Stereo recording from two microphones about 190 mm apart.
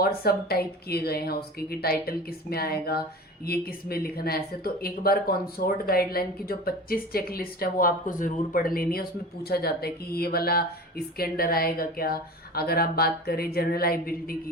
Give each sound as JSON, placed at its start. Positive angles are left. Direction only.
{"t": 0.0, "sound": "speech", "side_deg": 55}